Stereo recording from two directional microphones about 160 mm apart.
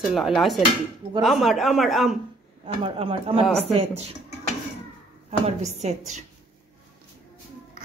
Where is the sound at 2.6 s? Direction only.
35° right (ahead or behind).